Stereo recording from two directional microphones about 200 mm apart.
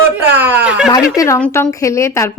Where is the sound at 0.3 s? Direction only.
10° right (ahead or behind).